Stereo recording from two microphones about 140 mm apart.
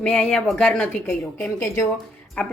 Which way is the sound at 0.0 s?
5° left (ahead or behind).